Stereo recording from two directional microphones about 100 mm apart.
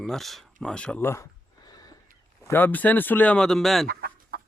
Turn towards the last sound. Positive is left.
turn(degrees=0)  # may be behind; listen again after turning